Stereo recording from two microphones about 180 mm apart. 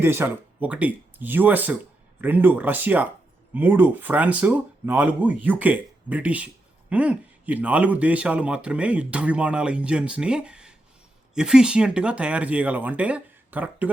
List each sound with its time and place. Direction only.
0.0 s a man's voice: 10° right (ahead or behind)